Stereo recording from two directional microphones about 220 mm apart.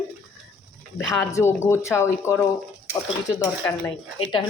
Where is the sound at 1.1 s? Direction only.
10° left (ahead or behind).